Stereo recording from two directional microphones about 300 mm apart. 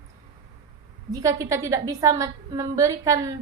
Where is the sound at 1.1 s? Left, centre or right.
Centre.